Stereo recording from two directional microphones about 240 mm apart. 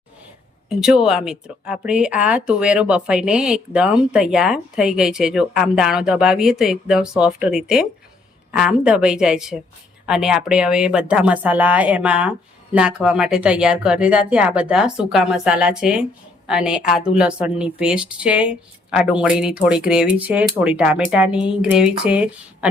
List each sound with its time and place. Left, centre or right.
0.7 s speech: centre